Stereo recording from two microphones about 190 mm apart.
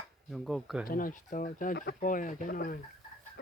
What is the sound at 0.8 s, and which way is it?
Speech, 45° left (ahead or behind).